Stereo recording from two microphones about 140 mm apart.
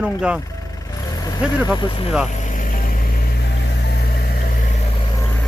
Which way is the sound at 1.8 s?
35° left (ahead or behind).